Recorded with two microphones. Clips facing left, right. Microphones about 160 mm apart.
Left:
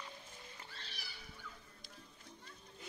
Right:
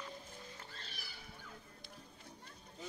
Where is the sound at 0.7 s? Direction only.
45° right (ahead or behind).